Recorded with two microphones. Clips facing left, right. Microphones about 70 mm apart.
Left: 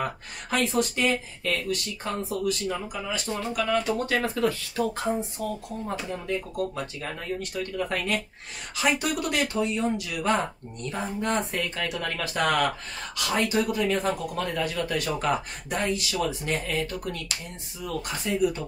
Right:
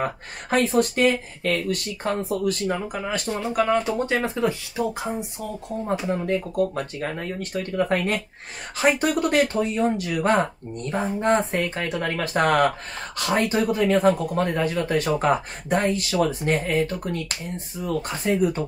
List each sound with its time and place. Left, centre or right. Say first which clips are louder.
0.0 s speech: right 4 dB; right
3.5 s speech: right 4 dB; right; by 5.5 s centre
6.0 s speech: right 6 dB; right